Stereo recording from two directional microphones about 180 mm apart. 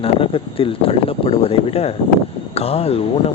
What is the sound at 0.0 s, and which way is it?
Speech, 30° left (ahead or behind).